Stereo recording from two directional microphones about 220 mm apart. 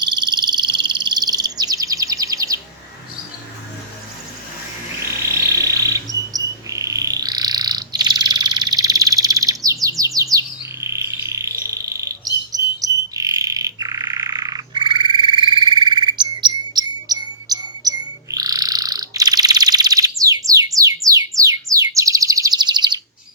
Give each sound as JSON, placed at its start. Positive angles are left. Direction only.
{"t": 0.0, "sound": "bird", "side_deg": -20}
{"t": 5.2, "sound": "bird", "side_deg": -15}
{"t": 9.8, "sound": "chirp", "side_deg": -15}
{"t": 10.2, "sound": "bird", "side_deg": -15}